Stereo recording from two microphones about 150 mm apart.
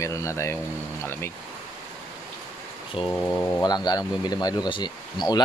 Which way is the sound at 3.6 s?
25° left (ahead or behind).